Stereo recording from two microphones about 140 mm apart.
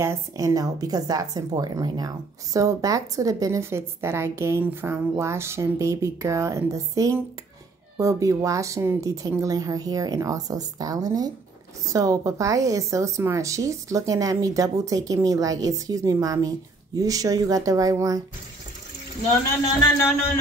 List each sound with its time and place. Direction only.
0.0 s a woman's voice: 20° right (ahead or behind)